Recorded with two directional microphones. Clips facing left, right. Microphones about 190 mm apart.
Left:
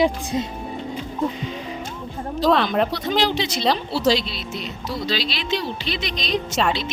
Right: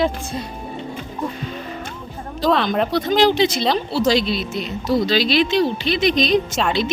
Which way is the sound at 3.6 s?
Centre (ahead or behind).